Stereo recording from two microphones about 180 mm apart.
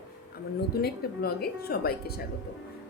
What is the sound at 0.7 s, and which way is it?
A woman's voice, 60° left (ahead or behind).